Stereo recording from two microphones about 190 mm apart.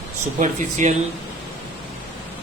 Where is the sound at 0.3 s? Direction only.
40° right (ahead or behind).